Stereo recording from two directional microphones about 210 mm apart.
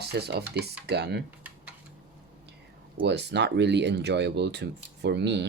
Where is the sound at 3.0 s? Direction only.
55° right (ahead or behind).